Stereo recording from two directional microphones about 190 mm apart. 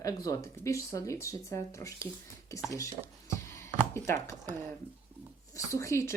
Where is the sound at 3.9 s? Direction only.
15° left (ahead or behind).